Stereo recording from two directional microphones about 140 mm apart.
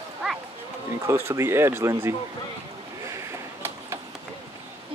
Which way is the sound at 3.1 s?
20° right (ahead or behind).